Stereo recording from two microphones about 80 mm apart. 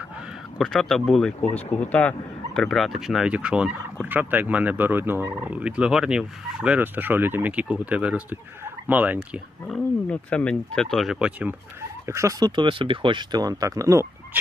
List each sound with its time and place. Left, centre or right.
0.6 s speech: centre
1.4 s speech: centre
2.6 s speech: centre
3.3 s fowl: centre
8.6 s turkey: right
10.1 s speech: centre
11.2 s fowl: right
12.0 s speech: right
12.4 s speech: right
13.4 s speech: right